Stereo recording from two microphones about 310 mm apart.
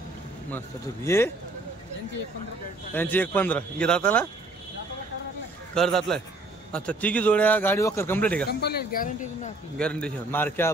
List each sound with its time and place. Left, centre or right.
0.5 s a man's voice: centre
2.9 s a man's voice: centre
5.8 s a man's voice: centre
8.5 s speech: left
9.8 s a man's voice: centre